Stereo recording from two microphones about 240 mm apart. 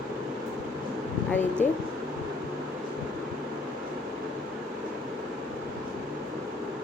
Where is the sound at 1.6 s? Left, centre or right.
Left.